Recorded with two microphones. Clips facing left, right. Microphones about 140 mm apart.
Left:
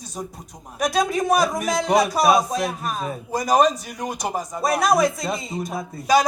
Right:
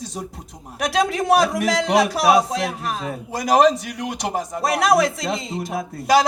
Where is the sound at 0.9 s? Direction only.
80° right.